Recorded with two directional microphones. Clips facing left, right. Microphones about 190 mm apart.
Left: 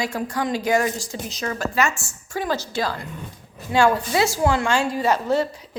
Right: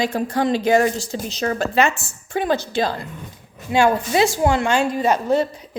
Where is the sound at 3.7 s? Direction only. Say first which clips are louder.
Right 2 dB; 20° right (ahead or behind).